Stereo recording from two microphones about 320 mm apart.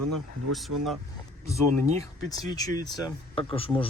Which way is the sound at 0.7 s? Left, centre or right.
Right.